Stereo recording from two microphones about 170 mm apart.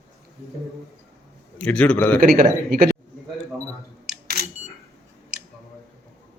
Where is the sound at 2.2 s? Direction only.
60° right (ahead or behind).